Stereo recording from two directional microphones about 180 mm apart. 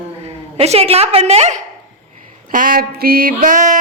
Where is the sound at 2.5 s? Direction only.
50° right (ahead or behind).